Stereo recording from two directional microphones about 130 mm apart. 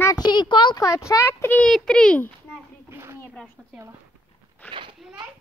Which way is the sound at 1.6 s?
5° left (ahead or behind).